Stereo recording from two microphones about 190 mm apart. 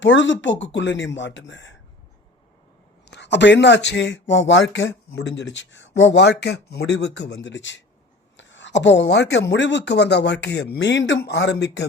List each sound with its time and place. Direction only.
0.0 s speech: 75° left (ahead or behind)
3.1 s speech: 65° left (ahead or behind)